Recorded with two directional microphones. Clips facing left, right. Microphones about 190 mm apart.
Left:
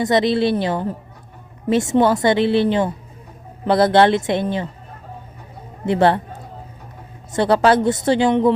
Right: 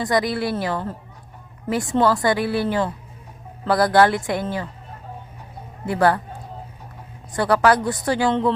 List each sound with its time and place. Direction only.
0.0 s a woman's voice: 25° left (ahead or behind)
5.8 s a woman's voice: 25° left (ahead or behind)
7.3 s a woman's voice: 25° left (ahead or behind)